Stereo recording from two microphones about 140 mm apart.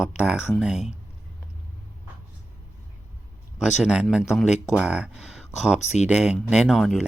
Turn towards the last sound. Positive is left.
turn(degrees=-5)  # may be behind; listen again after turning